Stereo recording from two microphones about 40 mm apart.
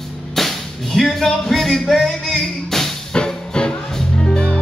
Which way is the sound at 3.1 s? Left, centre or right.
Left.